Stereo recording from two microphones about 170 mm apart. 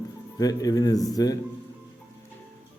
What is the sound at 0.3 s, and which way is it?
Speech, 20° left (ahead or behind).